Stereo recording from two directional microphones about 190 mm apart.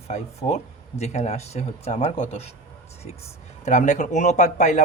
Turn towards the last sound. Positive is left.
turn(degrees=40)  # may be behind; listen again after turning